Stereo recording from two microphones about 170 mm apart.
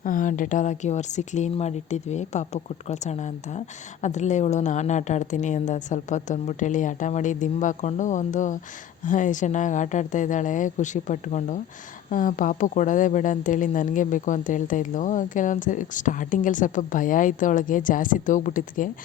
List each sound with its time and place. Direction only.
0.0 s speech: 50° left (ahead or behind)